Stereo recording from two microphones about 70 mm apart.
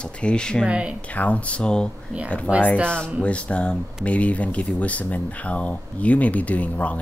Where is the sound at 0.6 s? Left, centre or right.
Centre.